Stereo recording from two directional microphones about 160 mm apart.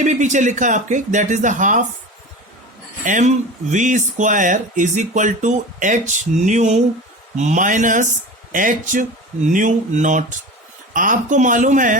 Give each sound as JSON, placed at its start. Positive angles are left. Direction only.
{"t": 0.0, "sound": "speech", "side_deg": -50}
{"t": 3.0, "sound": "a man's voice", "side_deg": -50}